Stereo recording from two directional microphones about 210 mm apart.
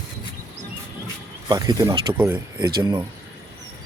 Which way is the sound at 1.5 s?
20° right (ahead or behind).